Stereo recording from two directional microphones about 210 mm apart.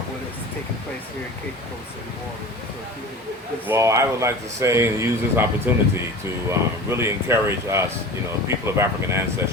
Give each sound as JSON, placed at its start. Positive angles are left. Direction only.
{"t": 3.7, "sound": "speech", "side_deg": -15}